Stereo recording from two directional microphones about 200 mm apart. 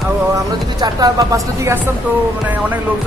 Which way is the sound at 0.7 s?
20° right (ahead or behind).